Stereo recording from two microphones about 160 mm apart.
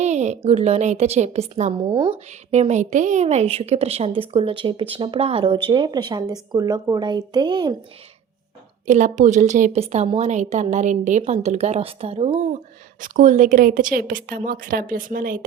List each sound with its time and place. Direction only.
0.0 s a woman's voice: 45° right (ahead or behind)
1.8 s a woman's voice: 30° right (ahead or behind)
2.5 s a woman's voice: 45° right (ahead or behind); by 7.8 s 25° right (ahead or behind)
8.9 s a woman's voice: 50° right (ahead or behind)
13.0 s a woman's voice: 50° right (ahead or behind)